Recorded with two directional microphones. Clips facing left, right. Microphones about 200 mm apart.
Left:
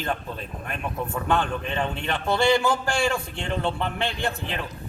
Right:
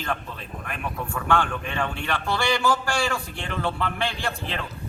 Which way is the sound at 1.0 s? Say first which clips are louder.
Even; 20° left (ahead or behind).